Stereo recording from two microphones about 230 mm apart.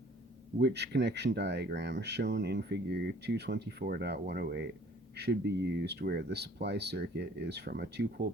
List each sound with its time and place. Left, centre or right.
0.6 s speech: right